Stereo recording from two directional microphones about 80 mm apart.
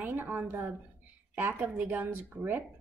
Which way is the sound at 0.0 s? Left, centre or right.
Right.